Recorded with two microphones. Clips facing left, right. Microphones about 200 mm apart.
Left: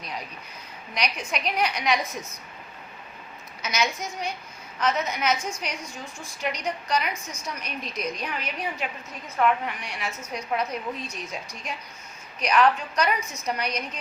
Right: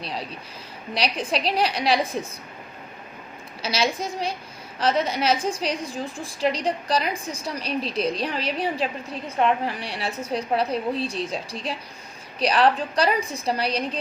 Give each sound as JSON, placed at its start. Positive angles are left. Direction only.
{"t": 0.0, "sound": "a woman's voice", "side_deg": -30}
{"t": 3.6, "sound": "a woman's voice", "side_deg": -30}